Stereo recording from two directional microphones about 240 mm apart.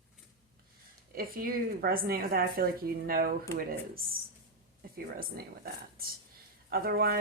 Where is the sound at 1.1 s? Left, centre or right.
Right.